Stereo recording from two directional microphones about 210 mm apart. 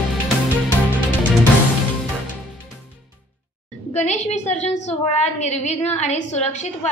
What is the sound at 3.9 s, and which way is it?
A woman's voice, 35° left (ahead or behind).